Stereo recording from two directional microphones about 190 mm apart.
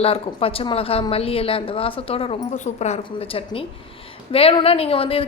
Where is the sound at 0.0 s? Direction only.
30° left (ahead or behind).